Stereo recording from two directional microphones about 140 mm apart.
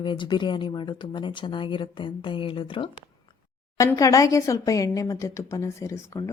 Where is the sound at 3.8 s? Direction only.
20° left (ahead or behind).